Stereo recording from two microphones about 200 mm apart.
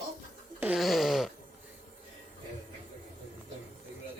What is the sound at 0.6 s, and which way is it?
Snoring, centre (ahead or behind).